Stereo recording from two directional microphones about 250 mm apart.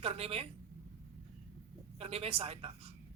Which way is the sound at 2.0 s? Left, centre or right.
Right.